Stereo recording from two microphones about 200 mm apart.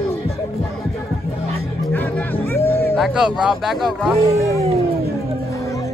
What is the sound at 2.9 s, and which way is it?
Speech, centre (ahead or behind).